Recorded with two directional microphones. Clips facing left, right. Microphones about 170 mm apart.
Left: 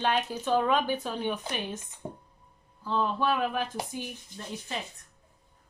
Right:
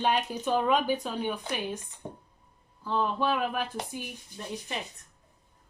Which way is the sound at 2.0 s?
20° left (ahead or behind).